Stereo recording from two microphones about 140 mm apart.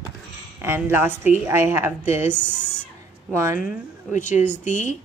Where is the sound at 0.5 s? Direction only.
15° right (ahead or behind).